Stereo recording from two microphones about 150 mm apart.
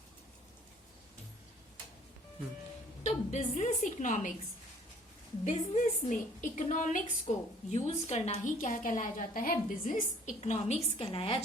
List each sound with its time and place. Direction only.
3.0 s a woman's voice: 50° left (ahead or behind)
5.5 s a woman's voice: 55° left (ahead or behind); by 11.4 s 40° left (ahead or behind)